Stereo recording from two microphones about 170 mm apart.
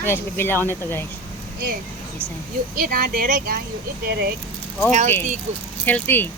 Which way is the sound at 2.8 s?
60° right (ahead or behind).